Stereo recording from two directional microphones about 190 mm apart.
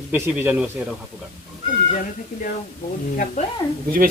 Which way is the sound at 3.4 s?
40° left (ahead or behind).